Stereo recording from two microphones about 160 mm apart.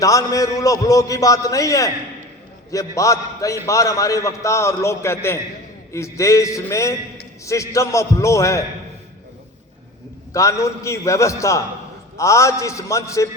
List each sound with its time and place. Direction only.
0.0 s a man's voice: 20° left (ahead or behind)
10.3 s a man's voice: 20° left (ahead or behind)